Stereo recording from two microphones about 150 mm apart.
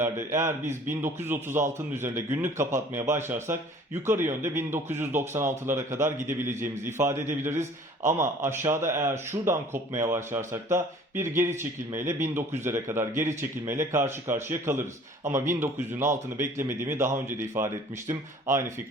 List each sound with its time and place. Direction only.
0.0 s a man's voice: 15° right (ahead or behind)